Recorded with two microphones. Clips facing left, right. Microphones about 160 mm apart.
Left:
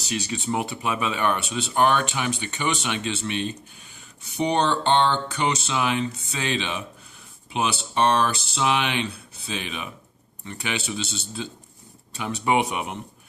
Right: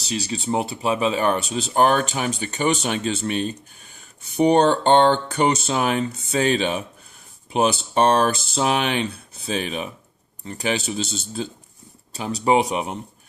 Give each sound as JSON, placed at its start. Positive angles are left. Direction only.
{"t": 0.0, "sound": "speech", "side_deg": -35}